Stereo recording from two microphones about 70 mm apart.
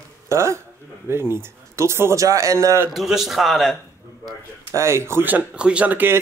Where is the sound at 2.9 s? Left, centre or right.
Centre.